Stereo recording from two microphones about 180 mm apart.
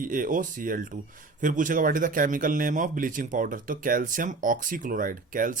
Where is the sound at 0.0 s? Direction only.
50° right (ahead or behind).